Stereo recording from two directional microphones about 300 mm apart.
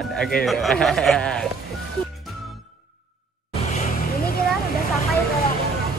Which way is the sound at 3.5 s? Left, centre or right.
Left.